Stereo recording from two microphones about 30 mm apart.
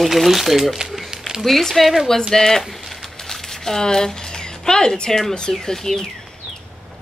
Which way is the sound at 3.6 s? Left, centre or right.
Centre.